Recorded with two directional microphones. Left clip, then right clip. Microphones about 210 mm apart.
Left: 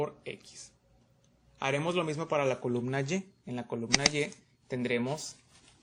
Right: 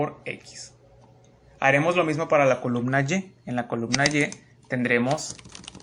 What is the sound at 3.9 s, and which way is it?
Speech, centre (ahead or behind).